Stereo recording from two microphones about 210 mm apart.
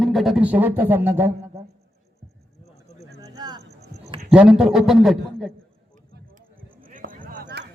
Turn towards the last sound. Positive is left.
turn(degrees=-45)  # may be behind; listen again after turning